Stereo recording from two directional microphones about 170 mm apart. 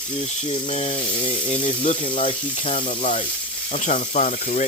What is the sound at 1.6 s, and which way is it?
Speech, 50° left (ahead or behind).